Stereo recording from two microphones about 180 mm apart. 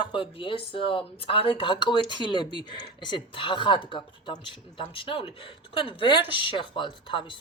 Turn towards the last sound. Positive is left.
turn(degrees=25)  # may be behind; listen again after turning